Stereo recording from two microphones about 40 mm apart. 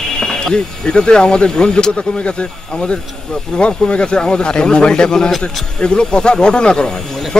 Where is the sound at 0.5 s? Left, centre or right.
Left.